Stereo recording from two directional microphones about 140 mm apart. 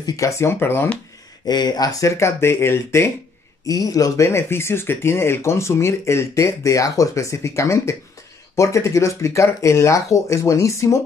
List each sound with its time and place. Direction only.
0.0 s speech: 20° left (ahead or behind)
1.5 s speech: 30° left (ahead or behind)